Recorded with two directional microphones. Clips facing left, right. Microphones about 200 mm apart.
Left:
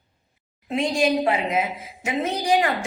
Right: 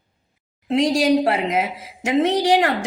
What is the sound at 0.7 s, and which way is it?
A woman's voice, 80° right.